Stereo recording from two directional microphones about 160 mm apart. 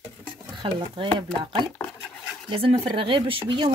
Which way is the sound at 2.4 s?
35° right (ahead or behind).